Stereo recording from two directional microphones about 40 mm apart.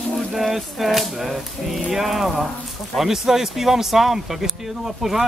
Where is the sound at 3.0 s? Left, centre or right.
Centre.